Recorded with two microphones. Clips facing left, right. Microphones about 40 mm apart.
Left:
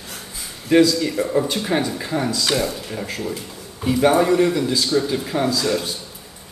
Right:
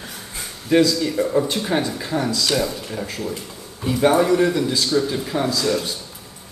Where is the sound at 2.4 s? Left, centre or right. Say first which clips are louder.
Left 1 dB; left.